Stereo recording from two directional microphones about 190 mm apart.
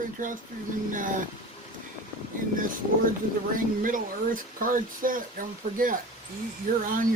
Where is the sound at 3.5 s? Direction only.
45° right (ahead or behind).